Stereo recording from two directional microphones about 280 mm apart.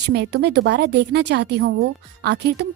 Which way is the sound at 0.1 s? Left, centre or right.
Right.